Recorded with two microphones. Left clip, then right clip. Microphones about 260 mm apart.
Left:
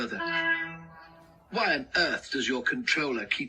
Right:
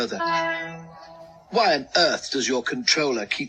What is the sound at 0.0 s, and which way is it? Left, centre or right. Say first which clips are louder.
Speech: right 6 dB; centre.